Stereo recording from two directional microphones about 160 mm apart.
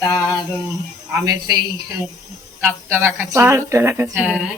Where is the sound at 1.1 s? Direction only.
20° right (ahead or behind).